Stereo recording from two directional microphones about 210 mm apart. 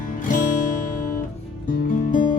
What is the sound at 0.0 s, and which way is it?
Music, 40° left (ahead or behind).